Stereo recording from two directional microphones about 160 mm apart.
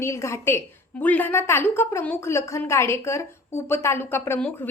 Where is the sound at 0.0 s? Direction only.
15° left (ahead or behind).